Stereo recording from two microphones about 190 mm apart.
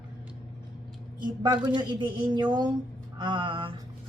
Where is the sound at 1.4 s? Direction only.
20° right (ahead or behind).